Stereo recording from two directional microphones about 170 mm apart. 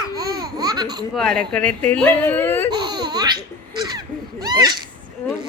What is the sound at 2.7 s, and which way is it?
Laughter, 25° right (ahead or behind).